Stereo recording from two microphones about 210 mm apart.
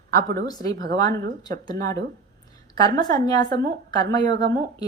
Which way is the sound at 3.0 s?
20° left (ahead or behind).